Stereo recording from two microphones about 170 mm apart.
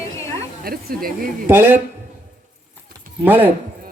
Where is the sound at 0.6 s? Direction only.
60° right (ahead or behind).